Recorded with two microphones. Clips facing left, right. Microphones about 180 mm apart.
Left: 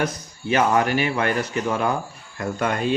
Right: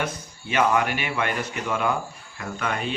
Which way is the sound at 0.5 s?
40° left (ahead or behind).